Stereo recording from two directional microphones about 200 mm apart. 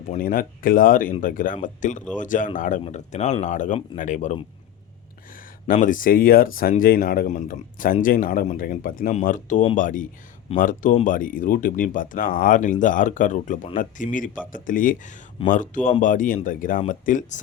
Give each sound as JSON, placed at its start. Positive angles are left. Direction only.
{"t": 0.1, "sound": "speech", "side_deg": 45}
{"t": 5.8, "sound": "speech", "side_deg": 40}